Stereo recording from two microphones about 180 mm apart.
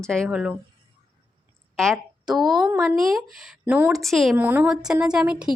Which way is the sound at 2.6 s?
15° right (ahead or behind).